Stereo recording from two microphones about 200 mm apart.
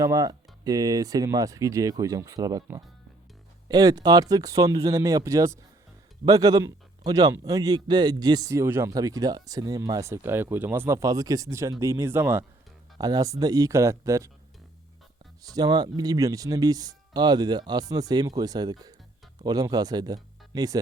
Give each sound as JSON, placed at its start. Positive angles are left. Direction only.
{"t": 0.0, "sound": "a man's voice", "side_deg": -15}
{"t": 15.4, "sound": "speech", "side_deg": -20}